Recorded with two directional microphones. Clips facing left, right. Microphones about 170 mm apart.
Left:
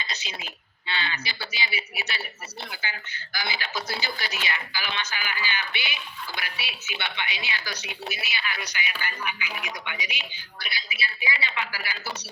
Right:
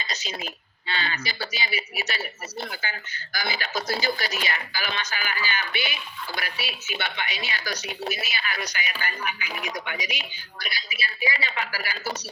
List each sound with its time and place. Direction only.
0.0 s speech: 40° right (ahead or behind)